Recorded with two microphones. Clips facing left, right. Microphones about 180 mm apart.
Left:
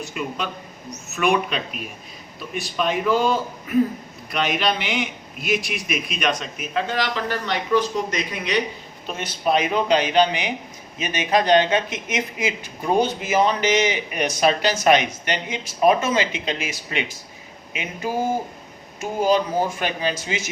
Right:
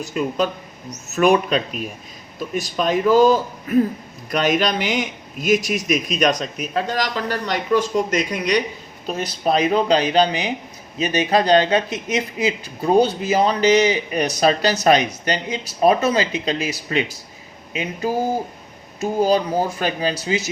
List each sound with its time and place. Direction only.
0.0 s a man's voice: 40° right (ahead or behind)
18.9 s a man's voice: 40° right (ahead or behind)